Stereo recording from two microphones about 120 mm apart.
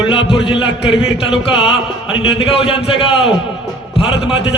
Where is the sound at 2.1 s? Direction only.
50° left (ahead or behind).